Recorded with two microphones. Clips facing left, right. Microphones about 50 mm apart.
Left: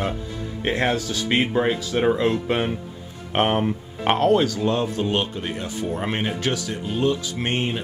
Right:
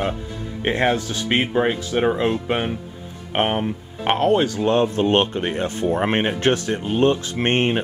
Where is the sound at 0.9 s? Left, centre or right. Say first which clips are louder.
Right 1 dB; right.